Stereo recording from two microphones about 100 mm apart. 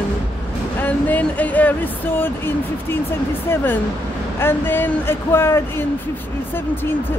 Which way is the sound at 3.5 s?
25° left (ahead or behind).